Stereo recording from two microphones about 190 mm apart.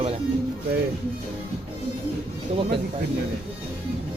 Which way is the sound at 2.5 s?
30° right (ahead or behind).